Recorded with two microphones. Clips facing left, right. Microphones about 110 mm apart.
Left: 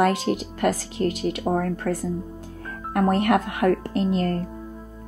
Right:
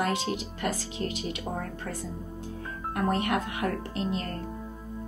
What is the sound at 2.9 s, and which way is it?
Speech, 60° left (ahead or behind).